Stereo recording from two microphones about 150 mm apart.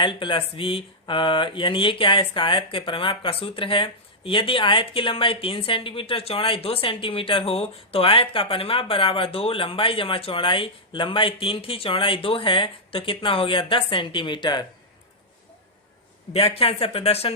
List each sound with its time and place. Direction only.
0.0 s speech: 35° left (ahead or behind)
16.3 s speech: 40° left (ahead or behind)